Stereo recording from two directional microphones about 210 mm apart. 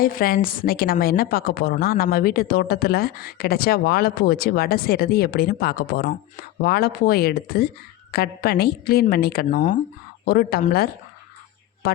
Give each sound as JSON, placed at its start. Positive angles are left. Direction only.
{"t": 0.0, "sound": "a woman's voice", "side_deg": 45}